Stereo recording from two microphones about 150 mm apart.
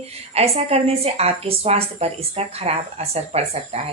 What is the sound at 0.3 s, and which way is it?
A woman's voice, 40° right (ahead or behind).